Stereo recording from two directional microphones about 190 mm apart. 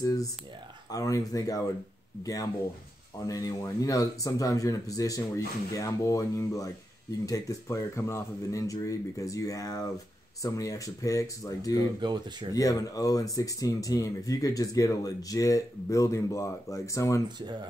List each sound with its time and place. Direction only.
0.0 s speech: 20° left (ahead or behind)
3.3 s speech: 20° left (ahead or behind)
12.0 s speech: 25° right (ahead or behind)
12.5 s speech: 20° left (ahead or behind)